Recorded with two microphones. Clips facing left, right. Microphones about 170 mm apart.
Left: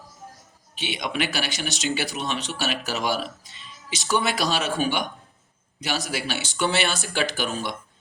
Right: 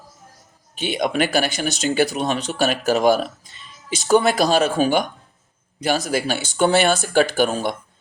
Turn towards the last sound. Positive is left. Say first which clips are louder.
# right 8 dB
turn(degrees=-50)  # may be behind; listen again after turning